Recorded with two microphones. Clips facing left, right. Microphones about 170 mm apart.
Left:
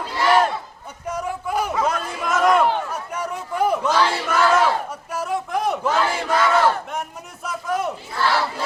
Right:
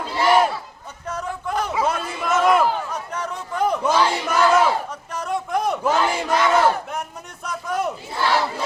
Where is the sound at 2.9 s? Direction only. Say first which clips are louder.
Left 1 dB; 10° left (ahead or behind).